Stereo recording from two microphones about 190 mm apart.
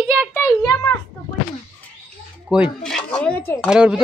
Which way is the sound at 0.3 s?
15° left (ahead or behind).